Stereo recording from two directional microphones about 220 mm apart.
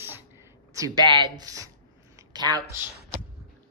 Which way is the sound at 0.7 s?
15° right (ahead or behind).